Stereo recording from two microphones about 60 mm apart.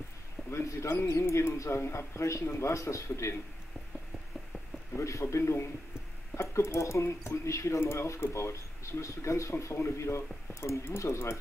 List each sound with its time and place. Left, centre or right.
0.5 s speech: left
4.9 s speech: left
7.8 s speech: left